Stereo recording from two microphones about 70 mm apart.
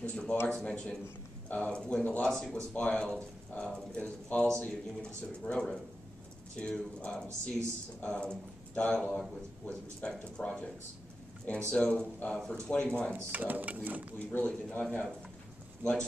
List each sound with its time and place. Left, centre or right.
0.0 s a sound: centre
0.5 s speech: centre
2.2 s speech: centre
2.5 s a man's voice: centre
11.7 s speech: centre
13.3 s speech: right
14.1 s a man's voice: left